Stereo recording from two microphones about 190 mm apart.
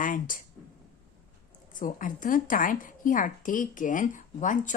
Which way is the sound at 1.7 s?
45° left (ahead or behind).